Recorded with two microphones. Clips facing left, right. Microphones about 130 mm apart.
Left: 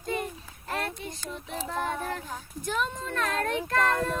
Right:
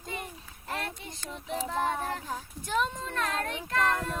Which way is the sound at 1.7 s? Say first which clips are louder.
Even; 25° right (ahead or behind).